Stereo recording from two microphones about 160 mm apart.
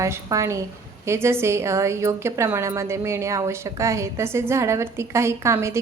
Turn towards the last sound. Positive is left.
turn(degrees=-15)  # may be behind; listen again after turning